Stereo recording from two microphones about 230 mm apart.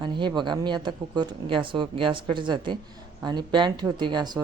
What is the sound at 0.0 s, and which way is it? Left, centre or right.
Speech, centre.